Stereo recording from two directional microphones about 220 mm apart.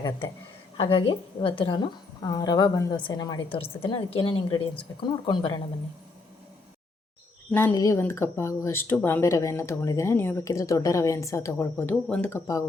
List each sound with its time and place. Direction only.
0.8 s a woman's voice: 25° left (ahead or behind)
7.5 s speech: 15° left (ahead or behind)